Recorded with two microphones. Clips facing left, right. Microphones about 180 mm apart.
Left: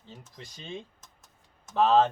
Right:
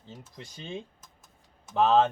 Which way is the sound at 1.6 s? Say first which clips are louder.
Even; 10° right (ahead or behind).